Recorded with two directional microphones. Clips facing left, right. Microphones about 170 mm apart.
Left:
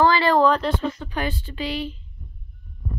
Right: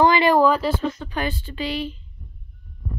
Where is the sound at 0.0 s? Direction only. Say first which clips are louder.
Right 1 dB; 15° right (ahead or behind).